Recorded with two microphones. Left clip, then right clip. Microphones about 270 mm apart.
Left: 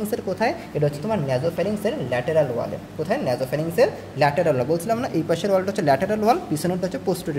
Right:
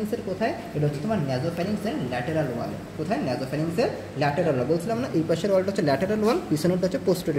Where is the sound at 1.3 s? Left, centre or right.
Left.